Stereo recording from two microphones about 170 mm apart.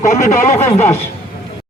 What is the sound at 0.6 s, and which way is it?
Speech, 15° left (ahead or behind).